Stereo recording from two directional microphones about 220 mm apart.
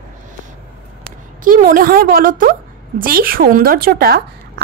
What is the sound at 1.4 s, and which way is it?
A woman's voice, 40° right (ahead or behind).